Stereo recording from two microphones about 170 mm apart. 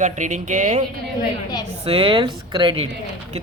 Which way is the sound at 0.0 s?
45° right (ahead or behind).